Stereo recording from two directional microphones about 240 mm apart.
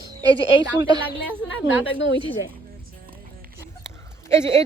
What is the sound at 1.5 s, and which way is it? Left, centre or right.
Speech, left.